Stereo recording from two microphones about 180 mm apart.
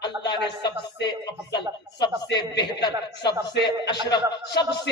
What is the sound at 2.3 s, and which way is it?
A man's voice, 25° left (ahead or behind).